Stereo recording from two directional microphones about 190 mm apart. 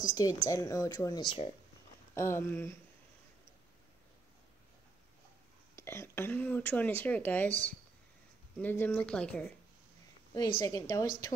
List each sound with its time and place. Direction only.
0.0 s speech: 20° left (ahead or behind)
2.1 s speech: 15° left (ahead or behind)
5.8 s speech: 15° left (ahead or behind)
7.4 s speech: 40° right (ahead or behind)
8.5 s speech: 10° left (ahead or behind)
10.3 s speech: 20° left (ahead or behind)